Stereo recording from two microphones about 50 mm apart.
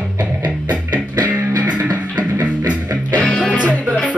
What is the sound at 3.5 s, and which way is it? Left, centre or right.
Music, right.